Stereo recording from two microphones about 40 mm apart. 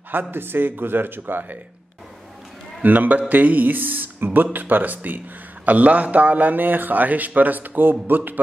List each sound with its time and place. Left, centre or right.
0.1 s a man's voice: right
2.8 s a man's voice: right
5.7 s a man's voice: right